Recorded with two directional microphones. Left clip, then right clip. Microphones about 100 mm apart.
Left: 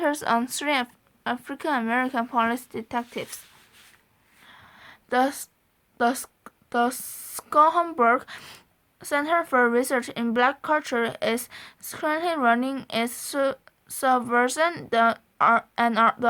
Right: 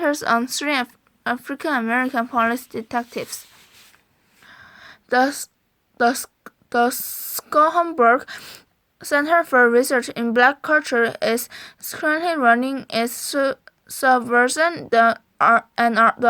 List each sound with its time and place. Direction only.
0.0 s speech: 25° right (ahead or behind)
4.4 s a sound: 35° right (ahead or behind)
6.0 s a woman's voice: 30° right (ahead or behind)
8.4 s speech: 20° right (ahead or behind)
9.0 s speech: 35° right (ahead or behind)